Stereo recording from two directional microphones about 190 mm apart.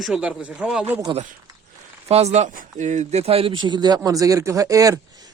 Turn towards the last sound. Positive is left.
turn(degrees=-20)  # may be behind; listen again after turning